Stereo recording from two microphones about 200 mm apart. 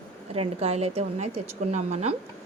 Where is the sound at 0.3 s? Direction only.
30° right (ahead or behind).